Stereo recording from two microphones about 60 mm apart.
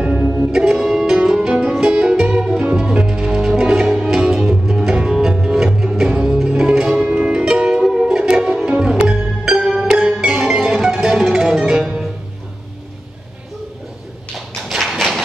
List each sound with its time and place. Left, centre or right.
0.2 s music: right
0.5 s music: centre
9.5 s music: centre
14.6 s tap: centre